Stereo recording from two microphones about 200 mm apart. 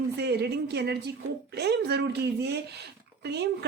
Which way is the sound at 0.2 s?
55° right (ahead or behind).